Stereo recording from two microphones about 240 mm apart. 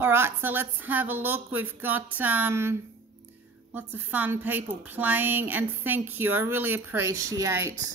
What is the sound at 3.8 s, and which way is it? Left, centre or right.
Speech, centre.